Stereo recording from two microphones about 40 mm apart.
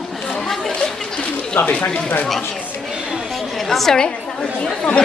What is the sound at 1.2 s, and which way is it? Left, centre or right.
Bird, left.